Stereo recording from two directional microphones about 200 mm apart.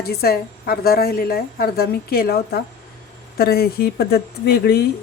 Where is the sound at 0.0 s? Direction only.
50° left (ahead or behind).